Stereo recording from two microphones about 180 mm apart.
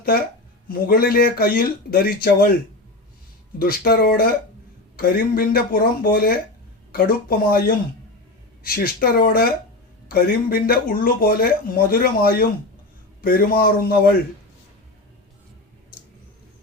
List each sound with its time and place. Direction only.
0.0 s speech: 55° left (ahead or behind)
3.6 s speech: 55° left (ahead or behind)